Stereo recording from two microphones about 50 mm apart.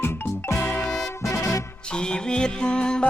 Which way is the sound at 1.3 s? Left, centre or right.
Left.